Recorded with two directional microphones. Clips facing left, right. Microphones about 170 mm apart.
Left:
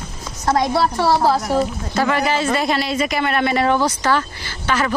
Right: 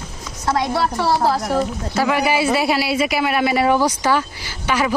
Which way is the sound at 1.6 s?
5° right (ahead or behind).